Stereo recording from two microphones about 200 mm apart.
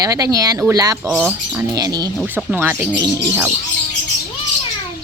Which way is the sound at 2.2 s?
10° right (ahead or behind).